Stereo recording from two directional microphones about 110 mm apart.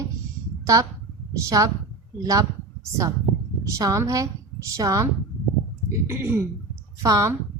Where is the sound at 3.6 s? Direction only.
30° right (ahead or behind).